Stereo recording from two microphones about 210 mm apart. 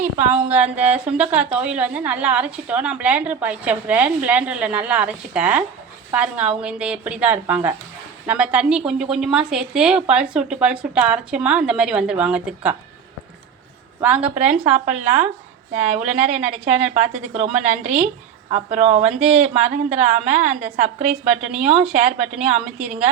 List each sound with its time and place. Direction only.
0.0 s a woman's voice: 10° right (ahead or behind)
14.0 s a woman's voice: 5° right (ahead or behind)
18.8 s speech: 30° right (ahead or behind)
19.0 s a woman's voice: 5° right (ahead or behind)